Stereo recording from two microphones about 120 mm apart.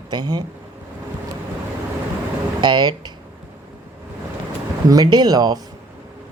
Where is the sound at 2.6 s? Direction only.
40° right (ahead or behind).